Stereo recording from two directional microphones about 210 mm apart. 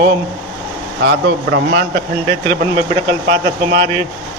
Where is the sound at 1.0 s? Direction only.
55° right (ahead or behind).